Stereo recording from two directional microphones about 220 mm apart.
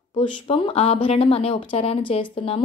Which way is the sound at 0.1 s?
25° left (ahead or behind).